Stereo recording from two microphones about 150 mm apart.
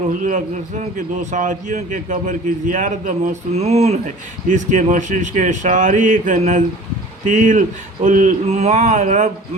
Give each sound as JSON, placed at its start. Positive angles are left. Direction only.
{"t": 0.1, "sound": "a man's voice", "side_deg": -60}